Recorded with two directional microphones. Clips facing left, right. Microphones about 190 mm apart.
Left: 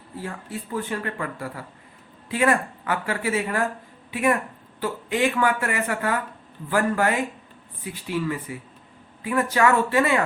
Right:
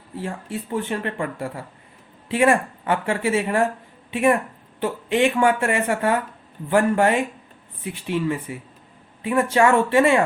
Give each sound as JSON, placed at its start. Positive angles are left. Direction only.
{"t": 0.2, "sound": "speech", "side_deg": -25}